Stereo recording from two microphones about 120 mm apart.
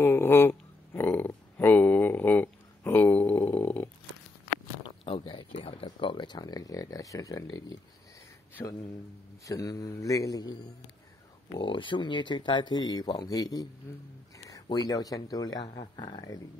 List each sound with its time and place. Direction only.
0.0 s a sound: 20° left (ahead or behind)
3.4 s snoring: 15° left (ahead or behind)
4.8 s a sound: 45° left (ahead or behind); by 7.6 s 30° left (ahead or behind)
8.6 s speech: 20° left (ahead or behind)
9.4 s a man's voice: 30° left (ahead or behind)
11.5 s speech: 45° left (ahead or behind)